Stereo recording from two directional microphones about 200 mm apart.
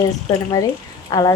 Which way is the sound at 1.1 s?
20° left (ahead or behind).